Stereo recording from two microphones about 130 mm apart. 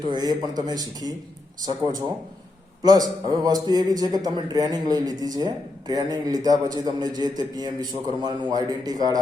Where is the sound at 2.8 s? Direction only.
30° right (ahead or behind).